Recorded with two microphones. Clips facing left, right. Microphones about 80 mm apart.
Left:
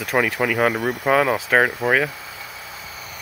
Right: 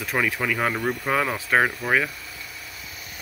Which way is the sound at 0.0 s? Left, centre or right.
Left.